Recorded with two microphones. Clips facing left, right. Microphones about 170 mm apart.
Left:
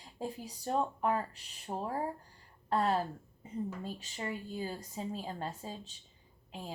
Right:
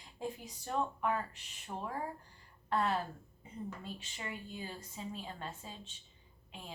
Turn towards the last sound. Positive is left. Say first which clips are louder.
# left 6 dB
turn(degrees=40)  # may be behind; listen again after turning